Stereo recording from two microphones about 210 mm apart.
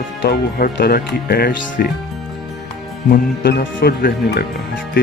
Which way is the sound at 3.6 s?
60° left (ahead or behind).